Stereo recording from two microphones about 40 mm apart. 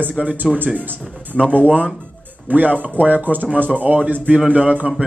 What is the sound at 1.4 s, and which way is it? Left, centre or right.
A man's voice, right.